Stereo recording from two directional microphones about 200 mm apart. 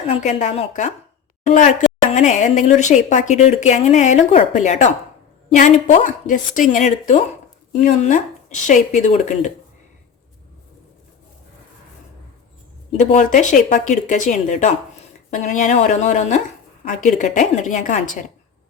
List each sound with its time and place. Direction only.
0.1 s a woman's voice: 35° left (ahead or behind)
13.0 s a woman's voice: 35° left (ahead or behind)